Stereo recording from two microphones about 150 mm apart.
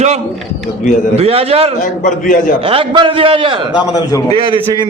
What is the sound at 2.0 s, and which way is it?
Speech, 60° left (ahead or behind).